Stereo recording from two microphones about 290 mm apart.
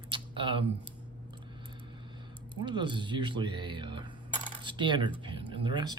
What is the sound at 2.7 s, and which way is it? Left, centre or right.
Speech, centre.